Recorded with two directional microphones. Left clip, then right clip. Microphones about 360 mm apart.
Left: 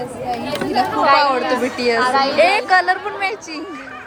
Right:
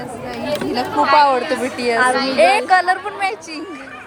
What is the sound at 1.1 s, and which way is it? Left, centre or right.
A woman's voice, centre.